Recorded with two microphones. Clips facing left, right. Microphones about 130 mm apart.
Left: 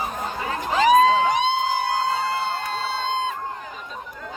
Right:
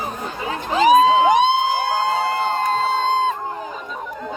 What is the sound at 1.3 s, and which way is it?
Crowd, 60° right (ahead or behind).